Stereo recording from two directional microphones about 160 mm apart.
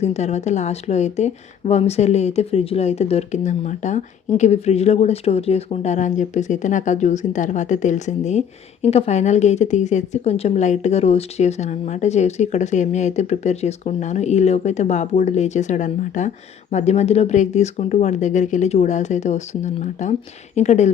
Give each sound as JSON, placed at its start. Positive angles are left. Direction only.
{"t": 0.0, "sound": "speech", "side_deg": 45}